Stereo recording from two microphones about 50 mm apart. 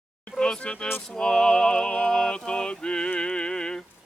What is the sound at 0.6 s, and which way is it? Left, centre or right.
Speech, left.